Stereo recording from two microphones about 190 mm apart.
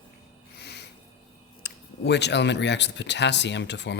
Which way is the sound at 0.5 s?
60° left (ahead or behind).